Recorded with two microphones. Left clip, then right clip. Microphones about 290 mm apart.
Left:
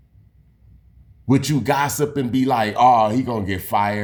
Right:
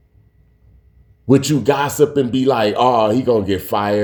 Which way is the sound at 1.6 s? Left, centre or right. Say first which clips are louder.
Right 5 dB; left.